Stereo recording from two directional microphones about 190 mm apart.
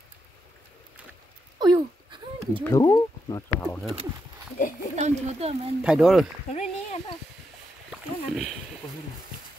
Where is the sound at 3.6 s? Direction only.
5° left (ahead or behind).